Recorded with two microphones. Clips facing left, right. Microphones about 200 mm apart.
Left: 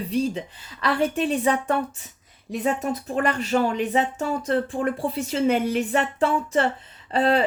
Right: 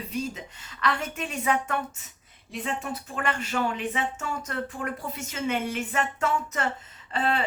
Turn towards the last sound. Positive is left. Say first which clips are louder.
# left 7 dB
turn(degrees=40)  # may be behind; listen again after turning